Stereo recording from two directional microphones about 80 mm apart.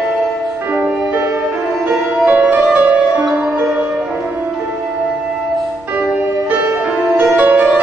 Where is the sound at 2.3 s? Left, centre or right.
Centre.